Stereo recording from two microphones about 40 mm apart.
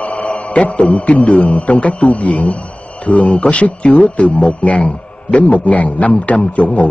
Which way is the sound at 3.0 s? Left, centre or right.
Left.